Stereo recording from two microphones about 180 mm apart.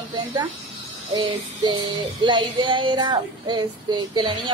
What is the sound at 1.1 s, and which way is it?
Child singing, 20° right (ahead or behind).